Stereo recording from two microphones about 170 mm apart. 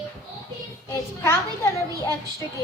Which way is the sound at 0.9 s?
15° left (ahead or behind).